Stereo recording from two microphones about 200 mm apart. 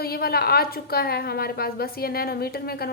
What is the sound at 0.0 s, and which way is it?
A woman's voice, 50° left (ahead or behind).